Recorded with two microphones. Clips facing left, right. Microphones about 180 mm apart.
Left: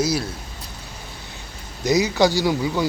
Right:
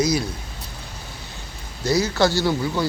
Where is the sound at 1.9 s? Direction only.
15° left (ahead or behind).